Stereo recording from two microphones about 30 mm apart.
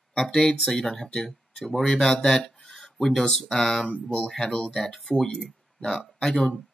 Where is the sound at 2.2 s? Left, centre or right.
Left.